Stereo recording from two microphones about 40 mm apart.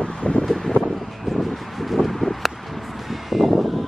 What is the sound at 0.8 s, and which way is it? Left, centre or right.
Vehicle, centre.